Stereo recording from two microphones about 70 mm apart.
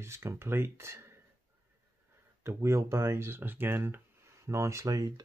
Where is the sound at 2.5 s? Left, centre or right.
Right.